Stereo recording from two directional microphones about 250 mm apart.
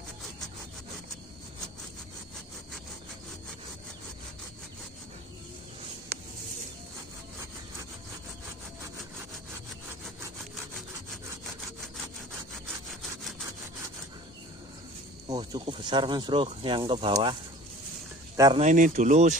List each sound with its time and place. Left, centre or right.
15.2 s speech: centre
18.3 s a sound: centre
18.6 s speech: right